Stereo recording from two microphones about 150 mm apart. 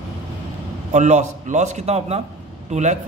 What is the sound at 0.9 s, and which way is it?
A man's voice, 50° right (ahead or behind).